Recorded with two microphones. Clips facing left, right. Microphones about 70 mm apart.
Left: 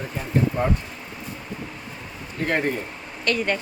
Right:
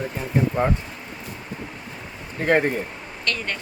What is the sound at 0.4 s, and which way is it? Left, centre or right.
Speech, centre.